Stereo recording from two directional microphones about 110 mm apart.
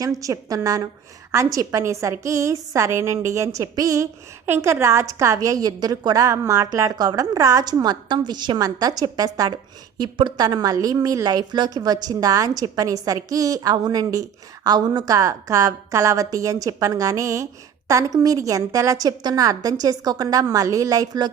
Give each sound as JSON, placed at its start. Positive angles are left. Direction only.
{"t": 0.0, "sound": "a woman's voice", "side_deg": -30}